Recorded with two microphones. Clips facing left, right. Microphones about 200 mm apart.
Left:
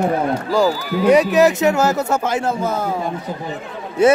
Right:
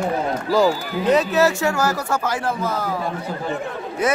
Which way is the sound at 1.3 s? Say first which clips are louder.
Left 4 dB; 20° left (ahead or behind).